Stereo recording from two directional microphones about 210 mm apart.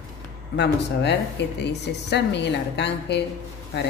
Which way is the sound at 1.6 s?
55° left (ahead or behind).